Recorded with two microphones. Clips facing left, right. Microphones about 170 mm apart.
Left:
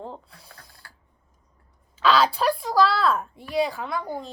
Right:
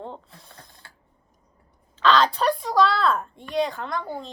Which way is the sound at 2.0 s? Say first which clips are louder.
Right 1 dB; 5° left (ahead or behind).